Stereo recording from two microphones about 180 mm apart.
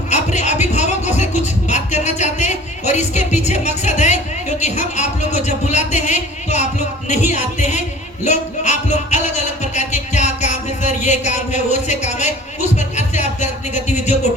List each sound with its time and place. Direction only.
0.1 s music: 40° left (ahead or behind)
1.6 s a woman's voice: 40° left (ahead or behind)
13.0 s music: 40° left (ahead or behind)
13.9 s a sound: 40° left (ahead or behind)